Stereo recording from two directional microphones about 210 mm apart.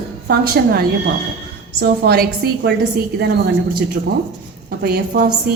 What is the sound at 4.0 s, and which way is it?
A woman's voice, 40° right (ahead or behind).